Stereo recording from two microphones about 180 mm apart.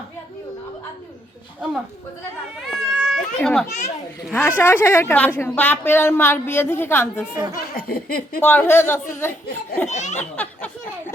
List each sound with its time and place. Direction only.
2.6 s speech: centre (ahead or behind)
3.7 s a child's voice: 40° left (ahead or behind)
4.3 s a woman's voice: 10° left (ahead or behind)
7.8 s speech: 55° left (ahead or behind)
8.4 s a woman's voice: 10° left (ahead or behind)
9.9 s a child's voice: 40° left (ahead or behind)
10.2 s speech: 10° left (ahead or behind)